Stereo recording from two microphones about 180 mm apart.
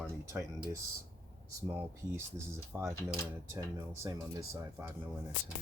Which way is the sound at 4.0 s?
15° right (ahead or behind).